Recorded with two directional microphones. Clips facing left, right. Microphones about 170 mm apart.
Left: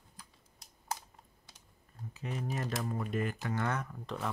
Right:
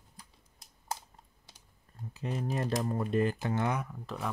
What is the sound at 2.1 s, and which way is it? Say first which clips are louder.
Speech: right 4 dB; 35° right (ahead or behind).